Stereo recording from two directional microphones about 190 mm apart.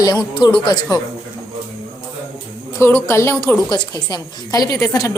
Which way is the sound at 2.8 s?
15° left (ahead or behind).